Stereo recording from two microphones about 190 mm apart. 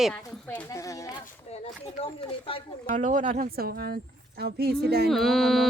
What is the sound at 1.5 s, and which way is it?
Speech, 35° left (ahead or behind).